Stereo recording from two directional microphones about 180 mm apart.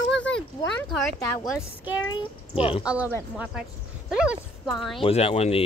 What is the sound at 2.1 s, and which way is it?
Speech, 30° left (ahead or behind).